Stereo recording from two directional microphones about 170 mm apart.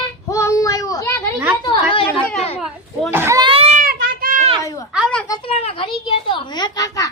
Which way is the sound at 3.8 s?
60° right (ahead or behind).